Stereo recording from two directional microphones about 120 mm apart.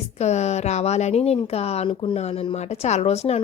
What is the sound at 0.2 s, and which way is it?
Speech, 65° left (ahead or behind).